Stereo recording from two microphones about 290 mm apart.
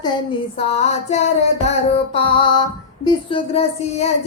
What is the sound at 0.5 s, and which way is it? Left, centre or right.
Music, left.